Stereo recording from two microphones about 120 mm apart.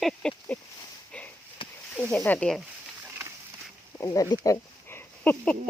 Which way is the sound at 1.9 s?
10° left (ahead or behind).